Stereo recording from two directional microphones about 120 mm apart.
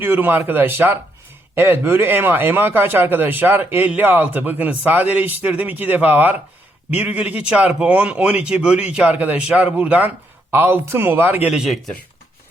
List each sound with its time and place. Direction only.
0.0 s a man's voice: 15° right (ahead or behind)
11.4 s a man's voice: 5° right (ahead or behind)